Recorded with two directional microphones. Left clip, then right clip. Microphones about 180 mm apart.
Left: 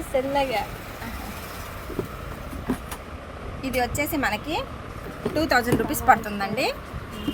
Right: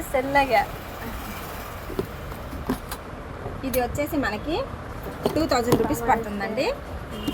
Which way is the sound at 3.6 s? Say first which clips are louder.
Even; 60° left (ahead or behind).